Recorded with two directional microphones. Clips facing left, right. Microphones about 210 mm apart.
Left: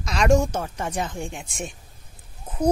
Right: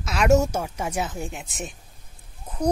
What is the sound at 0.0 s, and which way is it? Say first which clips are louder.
Speech: right 1 dB; 5° right (ahead or behind).